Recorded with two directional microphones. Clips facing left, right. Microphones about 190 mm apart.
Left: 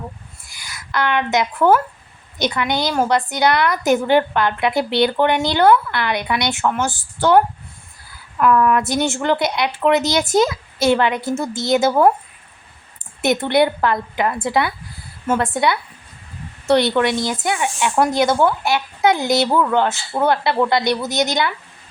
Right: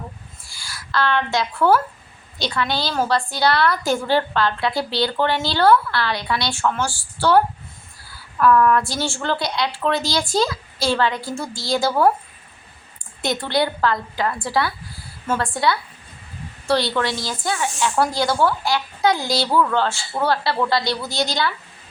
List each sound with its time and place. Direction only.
0.4 s a woman's voice: 20° left (ahead or behind)
13.2 s a woman's voice: 20° left (ahead or behind)